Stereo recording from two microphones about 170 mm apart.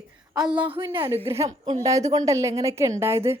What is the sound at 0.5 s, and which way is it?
A woman's voice, 30° right (ahead or behind).